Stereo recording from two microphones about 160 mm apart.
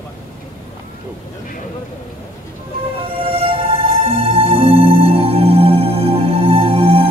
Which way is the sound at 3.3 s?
35° right (ahead or behind).